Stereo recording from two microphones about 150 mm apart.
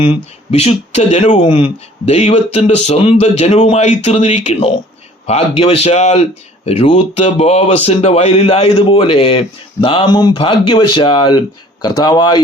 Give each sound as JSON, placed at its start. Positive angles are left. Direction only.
{"t": 0.0, "sound": "speech", "side_deg": 40}
{"t": 1.5, "sound": "speech", "side_deg": 35}